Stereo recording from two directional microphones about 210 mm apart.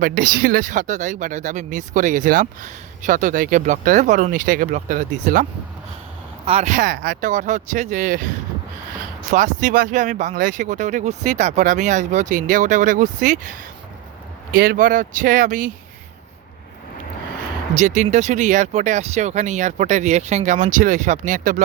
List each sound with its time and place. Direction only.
0.0 s speech: 40° right (ahead or behind)
9.3 s speech: 35° right (ahead or behind)
14.5 s speech: 45° right (ahead or behind)
17.7 s speech: 35° right (ahead or behind)